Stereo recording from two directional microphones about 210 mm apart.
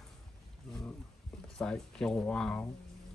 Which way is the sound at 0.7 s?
5° left (ahead or behind).